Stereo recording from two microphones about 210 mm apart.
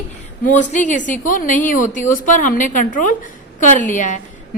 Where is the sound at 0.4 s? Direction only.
35° left (ahead or behind).